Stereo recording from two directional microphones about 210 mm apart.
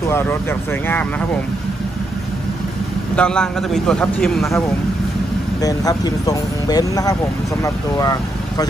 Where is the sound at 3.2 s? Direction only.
5° left (ahead or behind).